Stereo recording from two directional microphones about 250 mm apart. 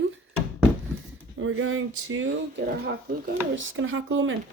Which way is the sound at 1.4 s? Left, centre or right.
Right.